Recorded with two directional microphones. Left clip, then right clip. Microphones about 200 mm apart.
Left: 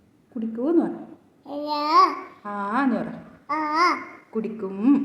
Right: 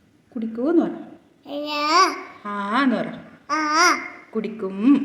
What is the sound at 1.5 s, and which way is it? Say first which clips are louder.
Babbling: right 2 dB; 10° right (ahead or behind).